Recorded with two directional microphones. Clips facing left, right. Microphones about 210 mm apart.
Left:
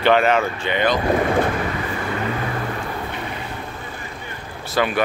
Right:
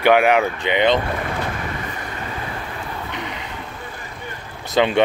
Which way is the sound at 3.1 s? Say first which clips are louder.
Left 1 dB; 20° right (ahead or behind).